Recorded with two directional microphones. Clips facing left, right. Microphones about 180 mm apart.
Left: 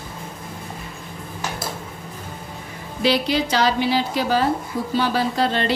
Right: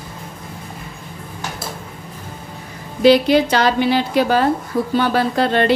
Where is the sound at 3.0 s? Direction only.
55° right (ahead or behind).